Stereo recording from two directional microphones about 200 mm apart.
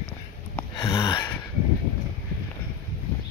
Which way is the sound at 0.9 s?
25° left (ahead or behind).